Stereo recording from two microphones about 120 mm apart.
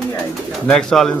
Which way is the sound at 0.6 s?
5° left (ahead or behind).